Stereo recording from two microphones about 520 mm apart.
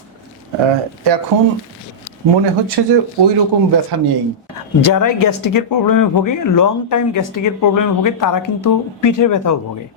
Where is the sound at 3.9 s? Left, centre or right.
Right.